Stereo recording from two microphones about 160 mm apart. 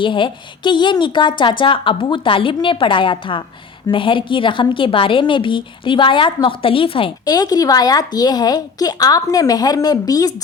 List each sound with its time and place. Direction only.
0.0 s a woman's voice: 30° left (ahead or behind)